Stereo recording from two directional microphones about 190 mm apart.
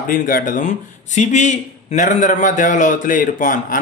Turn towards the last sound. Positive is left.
turn(degrees=45)  # may be behind; listen again after turning